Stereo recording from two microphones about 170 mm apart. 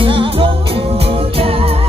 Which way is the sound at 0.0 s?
30° right (ahead or behind).